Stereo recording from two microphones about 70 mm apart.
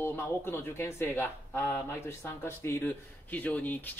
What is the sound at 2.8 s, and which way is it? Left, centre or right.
Speech, left.